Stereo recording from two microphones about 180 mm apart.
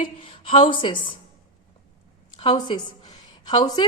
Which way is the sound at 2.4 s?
30° left (ahead or behind).